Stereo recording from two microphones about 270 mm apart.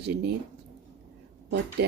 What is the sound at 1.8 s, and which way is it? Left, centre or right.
Speech, right.